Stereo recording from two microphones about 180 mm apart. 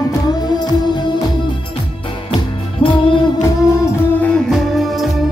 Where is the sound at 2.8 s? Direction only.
30° left (ahead or behind).